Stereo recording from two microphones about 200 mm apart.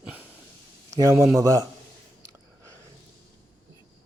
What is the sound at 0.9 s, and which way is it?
Speech, 15° right (ahead or behind).